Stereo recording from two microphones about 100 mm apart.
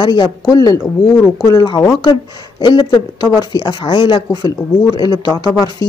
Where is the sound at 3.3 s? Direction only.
40° left (ahead or behind).